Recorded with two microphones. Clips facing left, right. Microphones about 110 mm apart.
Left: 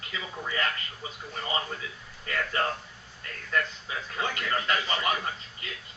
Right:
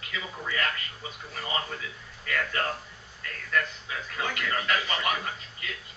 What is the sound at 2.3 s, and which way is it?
Speech, 30° left (ahead or behind).